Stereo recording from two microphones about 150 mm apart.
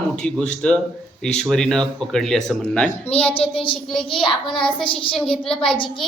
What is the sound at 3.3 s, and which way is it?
Child singing, 35° left (ahead or behind).